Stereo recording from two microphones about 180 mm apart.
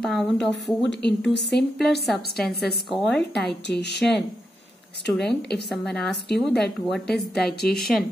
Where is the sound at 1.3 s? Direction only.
75° left (ahead or behind).